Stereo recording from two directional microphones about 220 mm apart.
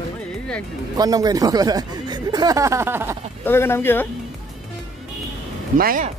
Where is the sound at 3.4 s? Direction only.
10° left (ahead or behind).